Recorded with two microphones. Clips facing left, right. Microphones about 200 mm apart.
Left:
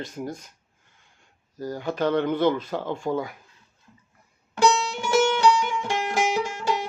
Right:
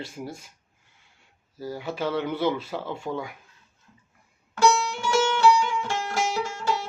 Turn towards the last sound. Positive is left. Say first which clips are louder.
# left 2 dB
turn(degrees=15)  # may be behind; listen again after turning